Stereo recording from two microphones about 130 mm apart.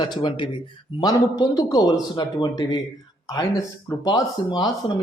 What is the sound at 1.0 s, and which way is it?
A man's voice, 30° left (ahead or behind).